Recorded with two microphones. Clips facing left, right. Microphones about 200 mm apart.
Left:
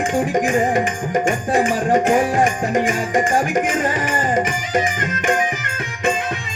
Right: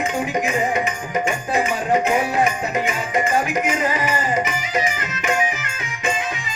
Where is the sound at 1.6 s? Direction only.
45° left (ahead or behind).